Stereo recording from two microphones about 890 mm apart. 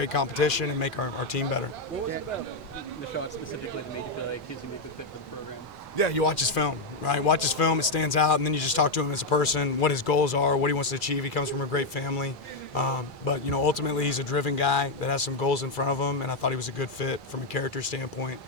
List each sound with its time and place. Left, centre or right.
0.0 s speech: left
6.0 s a man's voice: left